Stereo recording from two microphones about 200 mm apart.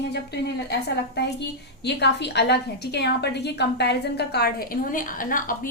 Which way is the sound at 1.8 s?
60° left (ahead or behind).